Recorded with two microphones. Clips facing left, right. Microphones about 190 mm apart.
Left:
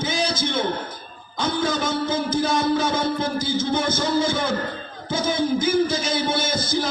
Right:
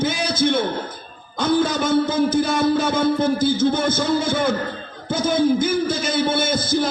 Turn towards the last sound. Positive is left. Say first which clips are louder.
# right 4 dB
turn(degrees=-55)  # may be behind; listen again after turning